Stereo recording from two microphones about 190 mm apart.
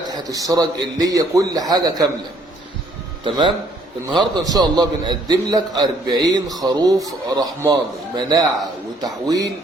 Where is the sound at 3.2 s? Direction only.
25° right (ahead or behind).